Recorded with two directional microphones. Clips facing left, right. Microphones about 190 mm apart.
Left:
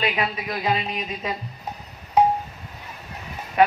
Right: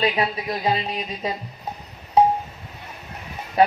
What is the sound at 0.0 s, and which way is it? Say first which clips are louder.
Speech: right 3 dB; 30° right (ahead or behind).